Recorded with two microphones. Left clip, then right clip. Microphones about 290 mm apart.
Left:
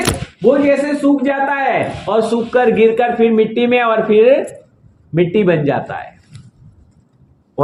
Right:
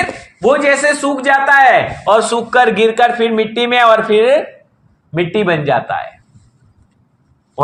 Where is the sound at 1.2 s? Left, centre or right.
Right.